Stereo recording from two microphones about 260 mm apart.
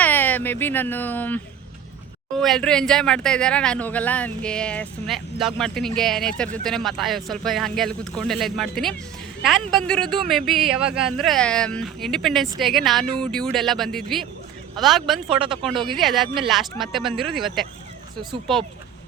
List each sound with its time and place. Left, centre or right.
0.0 s speech: centre
15.3 s speech: centre
15.6 s speech: centre